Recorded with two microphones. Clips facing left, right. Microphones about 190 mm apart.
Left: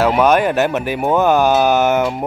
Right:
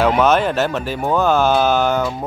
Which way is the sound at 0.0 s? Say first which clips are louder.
Left 1 dB; 10° left (ahead or behind).